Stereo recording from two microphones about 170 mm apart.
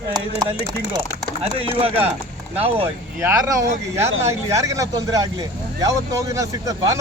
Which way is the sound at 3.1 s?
15° right (ahead or behind).